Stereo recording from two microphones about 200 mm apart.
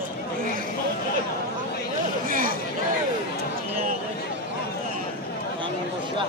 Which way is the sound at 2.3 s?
45° right (ahead or behind).